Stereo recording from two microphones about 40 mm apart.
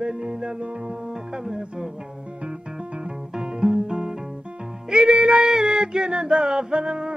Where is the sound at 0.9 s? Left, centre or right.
Centre.